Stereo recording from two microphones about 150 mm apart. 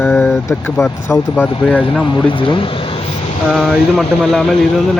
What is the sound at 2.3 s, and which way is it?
Speech, 35° left (ahead or behind).